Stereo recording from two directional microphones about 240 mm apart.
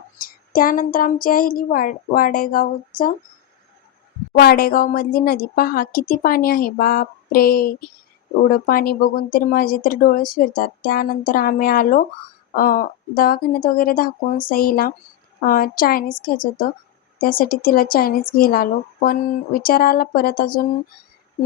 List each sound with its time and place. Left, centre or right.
0.2 s speech: left
4.3 s speech: left